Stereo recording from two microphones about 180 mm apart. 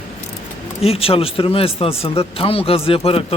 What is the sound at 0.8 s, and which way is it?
Speech, 35° left (ahead or behind).